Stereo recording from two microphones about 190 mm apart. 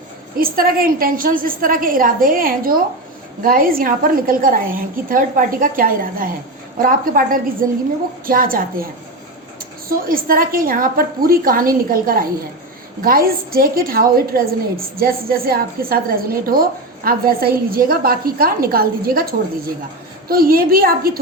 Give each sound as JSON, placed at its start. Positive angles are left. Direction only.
{"t": 0.3, "sound": "a woman's voice", "side_deg": -50}
{"t": 9.9, "sound": "a woman's voice", "side_deg": -50}